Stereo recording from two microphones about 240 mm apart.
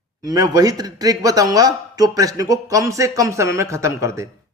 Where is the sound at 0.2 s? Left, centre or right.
Centre.